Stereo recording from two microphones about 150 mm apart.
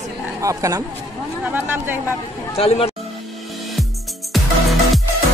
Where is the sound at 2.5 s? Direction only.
40° left (ahead or behind).